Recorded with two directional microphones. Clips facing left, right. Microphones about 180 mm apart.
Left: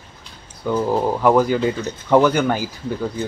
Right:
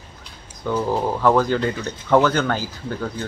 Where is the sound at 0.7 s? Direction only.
10° left (ahead or behind).